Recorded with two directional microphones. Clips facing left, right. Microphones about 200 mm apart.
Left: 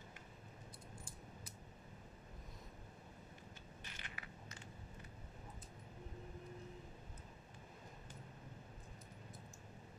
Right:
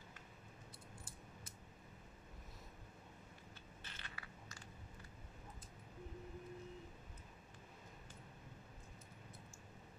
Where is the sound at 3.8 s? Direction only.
15° left (ahead or behind).